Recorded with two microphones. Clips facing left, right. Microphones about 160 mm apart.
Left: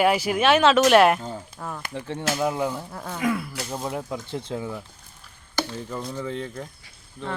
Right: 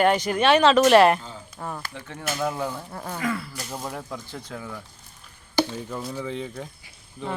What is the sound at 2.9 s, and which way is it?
Speech, 5° right (ahead or behind).